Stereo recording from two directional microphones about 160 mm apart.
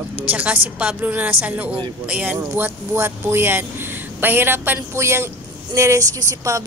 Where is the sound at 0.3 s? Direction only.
10° right (ahead or behind).